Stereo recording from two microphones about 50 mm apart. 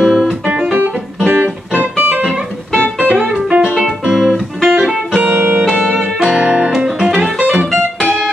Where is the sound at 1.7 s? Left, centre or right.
Right.